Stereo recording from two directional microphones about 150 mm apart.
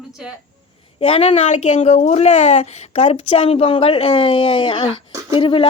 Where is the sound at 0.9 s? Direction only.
40° left (ahead or behind).